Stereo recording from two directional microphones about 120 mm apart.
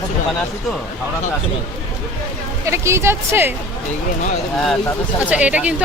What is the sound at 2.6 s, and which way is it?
Speech, 25° right (ahead or behind).